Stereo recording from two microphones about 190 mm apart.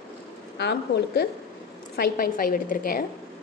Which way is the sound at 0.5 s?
65° left (ahead or behind).